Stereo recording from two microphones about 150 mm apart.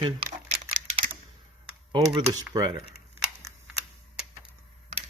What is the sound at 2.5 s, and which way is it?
Speech, 25° right (ahead or behind).